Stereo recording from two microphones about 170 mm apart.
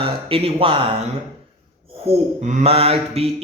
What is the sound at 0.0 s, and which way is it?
Speech, 35° right (ahead or behind).